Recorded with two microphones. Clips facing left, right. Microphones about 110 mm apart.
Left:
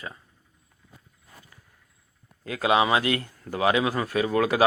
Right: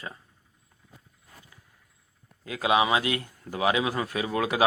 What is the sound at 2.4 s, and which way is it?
A man's voice, 15° right (ahead or behind).